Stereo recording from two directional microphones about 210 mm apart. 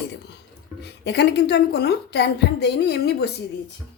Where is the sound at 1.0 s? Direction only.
55° left (ahead or behind).